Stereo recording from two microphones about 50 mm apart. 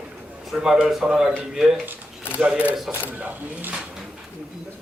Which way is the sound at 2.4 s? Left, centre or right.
Right.